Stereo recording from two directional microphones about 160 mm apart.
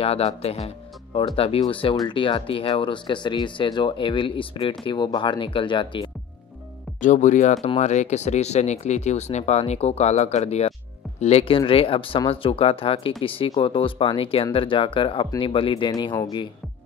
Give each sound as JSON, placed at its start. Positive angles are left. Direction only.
{"t": 0.0, "sound": "speech", "side_deg": 40}
{"t": 7.0, "sound": "speech", "side_deg": 50}